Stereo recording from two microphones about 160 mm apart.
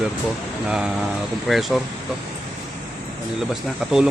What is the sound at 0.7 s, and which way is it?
Speech, 5° right (ahead or behind).